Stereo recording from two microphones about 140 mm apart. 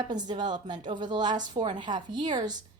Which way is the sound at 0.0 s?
30° right (ahead or behind).